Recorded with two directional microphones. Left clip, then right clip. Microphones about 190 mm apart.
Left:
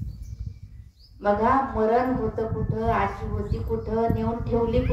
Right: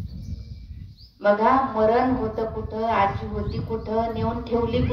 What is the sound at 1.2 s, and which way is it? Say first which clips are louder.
A woman's voice: right 3 dB; 35° right (ahead or behind).